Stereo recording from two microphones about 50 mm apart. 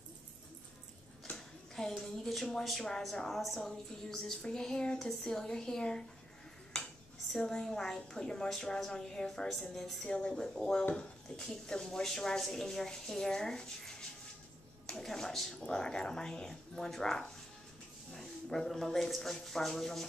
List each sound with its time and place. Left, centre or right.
1.3 s speech: centre
6.7 s dishes: centre
7.3 s speech: centre